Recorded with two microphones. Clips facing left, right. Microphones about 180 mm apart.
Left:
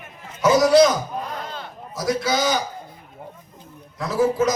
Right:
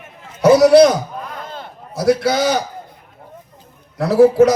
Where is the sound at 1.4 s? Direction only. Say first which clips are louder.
Right 2 dB; 50° right (ahead or behind).